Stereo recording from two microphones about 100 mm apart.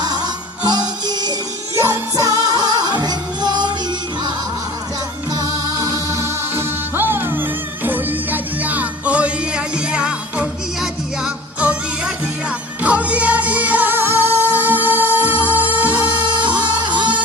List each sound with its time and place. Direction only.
0.0 s music: 45° right (ahead or behind)
1.7 s music: 30° right (ahead or behind); by 3.8 s 45° right (ahead or behind)
5.3 s music: 40° right (ahead or behind); by 15.9 s 15° right (ahead or behind)
16.1 s music: 50° right (ahead or behind)